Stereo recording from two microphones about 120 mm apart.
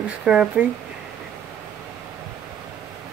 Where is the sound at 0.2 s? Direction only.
5° right (ahead or behind).